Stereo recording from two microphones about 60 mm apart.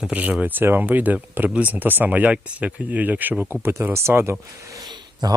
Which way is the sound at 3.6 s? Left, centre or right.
Right.